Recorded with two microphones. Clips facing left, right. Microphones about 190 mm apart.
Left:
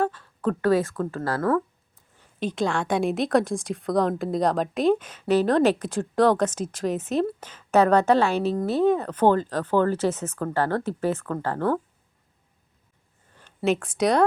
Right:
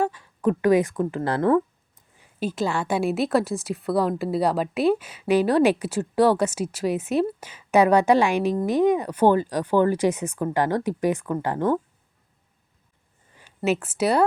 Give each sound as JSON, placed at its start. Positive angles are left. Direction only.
{"t": 0.0, "sound": "a sound", "side_deg": -15}
{"t": 2.1, "sound": "a woman's voice", "side_deg": -10}
{"t": 13.7, "sound": "speech", "side_deg": -5}